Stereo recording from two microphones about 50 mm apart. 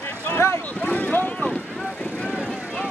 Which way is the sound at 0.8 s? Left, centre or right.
Left.